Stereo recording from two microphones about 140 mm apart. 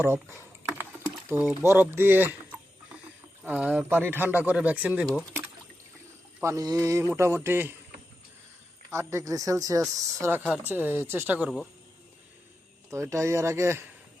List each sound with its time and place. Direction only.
0.0 s speech: 20° right (ahead or behind)
6.4 s a man's voice: 20° right (ahead or behind)
8.9 s a man's voice: 20° right (ahead or behind)
11.4 s speech: 5° left (ahead or behind)
12.9 s a man's voice: 20° right (ahead or behind)